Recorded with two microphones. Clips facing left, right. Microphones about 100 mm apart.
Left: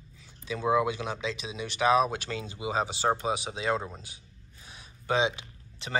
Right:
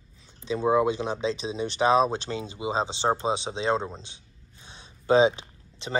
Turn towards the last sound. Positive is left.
turn(degrees=-20)  # may be behind; listen again after turning